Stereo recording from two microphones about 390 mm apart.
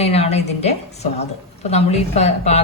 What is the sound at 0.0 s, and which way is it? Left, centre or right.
A woman's voice, centre.